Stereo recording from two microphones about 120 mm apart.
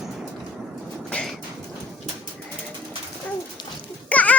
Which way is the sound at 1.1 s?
5° left (ahead or behind).